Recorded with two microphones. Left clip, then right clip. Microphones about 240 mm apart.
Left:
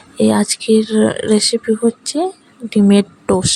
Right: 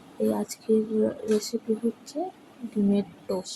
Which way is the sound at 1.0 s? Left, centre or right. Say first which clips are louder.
Left 12 dB; left.